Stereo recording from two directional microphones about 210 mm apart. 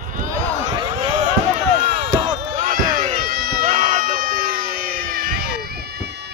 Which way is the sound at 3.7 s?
30° right (ahead or behind).